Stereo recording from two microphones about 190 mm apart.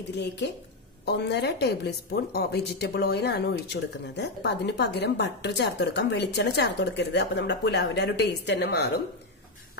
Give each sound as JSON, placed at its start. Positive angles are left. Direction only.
{"t": 1.0, "sound": "a woman's voice", "side_deg": 60}